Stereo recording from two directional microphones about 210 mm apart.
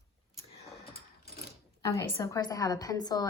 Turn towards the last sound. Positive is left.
turn(degrees=20)  # may be behind; listen again after turning